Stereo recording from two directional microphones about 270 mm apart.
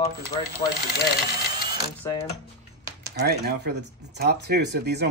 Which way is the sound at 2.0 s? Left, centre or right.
Centre.